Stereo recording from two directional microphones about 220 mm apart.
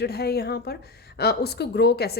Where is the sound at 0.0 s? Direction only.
45° left (ahead or behind).